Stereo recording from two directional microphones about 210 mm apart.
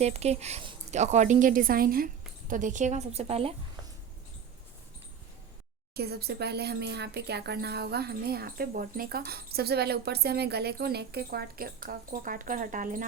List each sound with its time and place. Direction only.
0.0 s a woman's voice: 30° right (ahead or behind)
5.9 s speech: 50° right (ahead or behind)